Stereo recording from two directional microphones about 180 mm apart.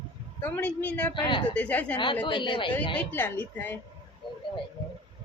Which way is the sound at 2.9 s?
10° left (ahead or behind).